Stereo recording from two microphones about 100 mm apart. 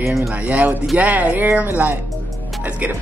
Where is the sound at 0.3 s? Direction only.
15° right (ahead or behind).